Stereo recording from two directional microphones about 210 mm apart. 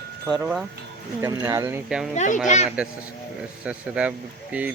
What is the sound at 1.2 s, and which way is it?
Speech, 15° right (ahead or behind).